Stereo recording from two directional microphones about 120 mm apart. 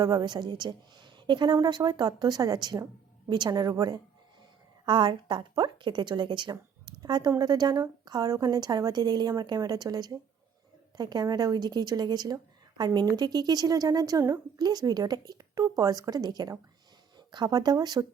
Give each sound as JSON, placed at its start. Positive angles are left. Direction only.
{"t": 0.0, "sound": "a woman's voice", "side_deg": -35}